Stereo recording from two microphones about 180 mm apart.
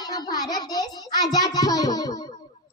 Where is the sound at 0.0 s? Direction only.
20° left (ahead or behind).